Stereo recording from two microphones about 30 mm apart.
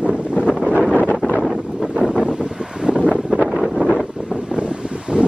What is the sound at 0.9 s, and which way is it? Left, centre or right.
Wind noise, left.